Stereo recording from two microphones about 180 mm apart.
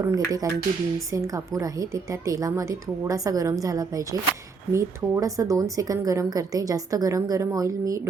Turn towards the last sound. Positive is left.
turn(degrees=-20)  # may be behind; listen again after turning